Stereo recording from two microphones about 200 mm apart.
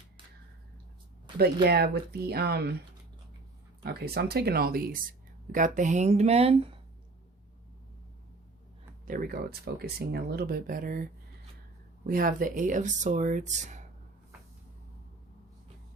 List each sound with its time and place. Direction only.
1.6 s speech: 50° right (ahead or behind)
3.8 s speech: 50° right (ahead or behind); by 6.7 s 30° right (ahead or behind)
9.0 s speech: 45° right (ahead or behind)